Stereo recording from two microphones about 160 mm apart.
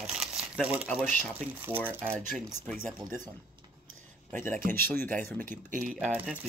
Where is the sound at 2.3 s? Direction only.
5° left (ahead or behind).